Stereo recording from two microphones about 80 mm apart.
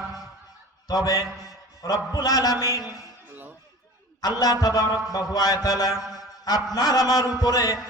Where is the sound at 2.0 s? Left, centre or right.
Left.